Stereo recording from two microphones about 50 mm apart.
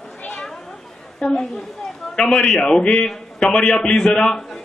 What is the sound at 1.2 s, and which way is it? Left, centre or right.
A man's voice, left.